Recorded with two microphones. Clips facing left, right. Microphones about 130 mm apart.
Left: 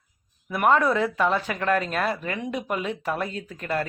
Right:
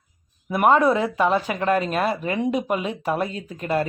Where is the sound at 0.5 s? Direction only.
15° right (ahead or behind).